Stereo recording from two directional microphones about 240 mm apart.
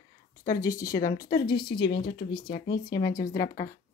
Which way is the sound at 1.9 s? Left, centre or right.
Left.